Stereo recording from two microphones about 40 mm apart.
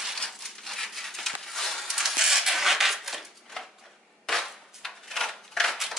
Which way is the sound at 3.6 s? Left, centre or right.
Centre.